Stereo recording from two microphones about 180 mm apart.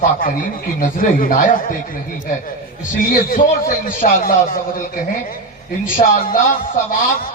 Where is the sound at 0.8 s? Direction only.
50° left (ahead or behind).